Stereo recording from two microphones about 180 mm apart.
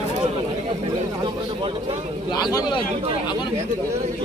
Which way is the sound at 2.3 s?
20° left (ahead or behind).